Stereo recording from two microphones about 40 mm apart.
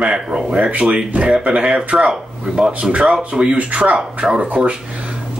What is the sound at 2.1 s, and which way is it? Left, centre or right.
Speech, centre.